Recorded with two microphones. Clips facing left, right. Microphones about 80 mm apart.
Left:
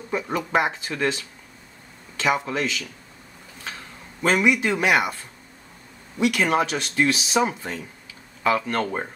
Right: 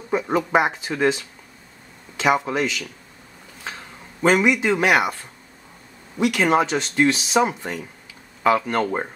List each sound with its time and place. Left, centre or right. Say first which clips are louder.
0.1 s speech: right 4 dB; centre
3.6 s a sound: right 2 dB; centre
6.1 s speech: right 2 dB; right